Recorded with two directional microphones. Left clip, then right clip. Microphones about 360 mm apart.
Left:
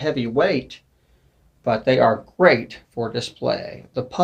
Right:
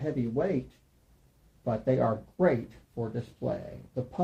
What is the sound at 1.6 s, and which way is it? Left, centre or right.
Speech, centre.